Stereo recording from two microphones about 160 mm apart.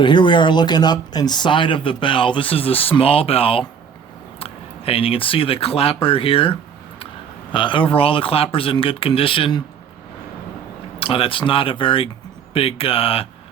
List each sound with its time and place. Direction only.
0.0 s speech: 30° left (ahead or behind)
11.0 s speech: 35° left (ahead or behind)